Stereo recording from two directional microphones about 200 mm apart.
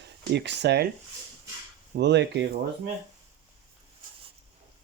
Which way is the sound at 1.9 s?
60° right (ahead or behind).